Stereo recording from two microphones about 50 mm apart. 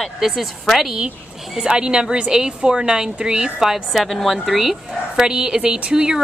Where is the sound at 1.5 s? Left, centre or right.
Centre.